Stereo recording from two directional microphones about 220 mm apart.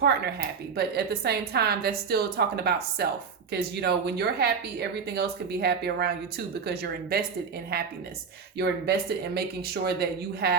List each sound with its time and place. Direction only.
0.0 s speech: 45° right (ahead or behind)
8.5 s speech: 45° right (ahead or behind)